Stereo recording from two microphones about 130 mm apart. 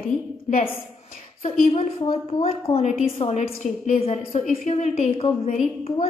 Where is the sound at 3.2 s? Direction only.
60° left (ahead or behind).